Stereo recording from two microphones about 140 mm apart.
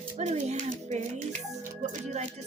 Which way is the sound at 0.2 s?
55° right (ahead or behind).